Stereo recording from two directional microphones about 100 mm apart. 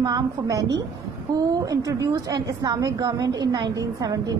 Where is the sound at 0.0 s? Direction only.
40° right (ahead or behind).